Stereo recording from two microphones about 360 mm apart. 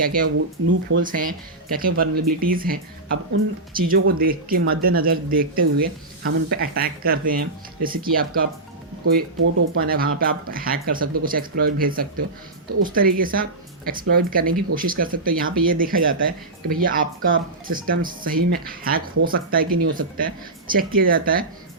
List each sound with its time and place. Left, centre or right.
0.0 s speech: right